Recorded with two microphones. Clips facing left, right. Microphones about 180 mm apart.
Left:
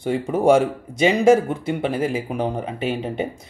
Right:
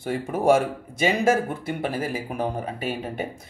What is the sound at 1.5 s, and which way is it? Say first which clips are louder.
Speech: left 5 dB; 20° left (ahead or behind).